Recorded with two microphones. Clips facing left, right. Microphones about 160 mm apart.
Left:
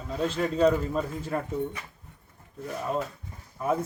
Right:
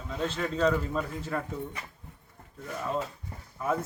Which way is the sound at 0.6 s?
15° left (ahead or behind).